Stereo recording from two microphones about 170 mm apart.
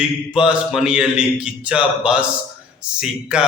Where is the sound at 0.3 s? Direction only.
5° right (ahead or behind).